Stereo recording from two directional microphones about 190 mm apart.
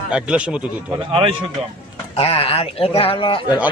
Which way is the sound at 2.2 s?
30° left (ahead or behind).